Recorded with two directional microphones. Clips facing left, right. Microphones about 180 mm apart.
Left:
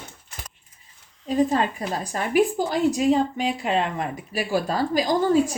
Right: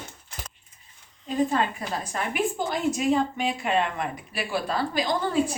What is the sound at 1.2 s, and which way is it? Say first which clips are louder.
A woman's voice: left 3 dB; 35° left (ahead or behind).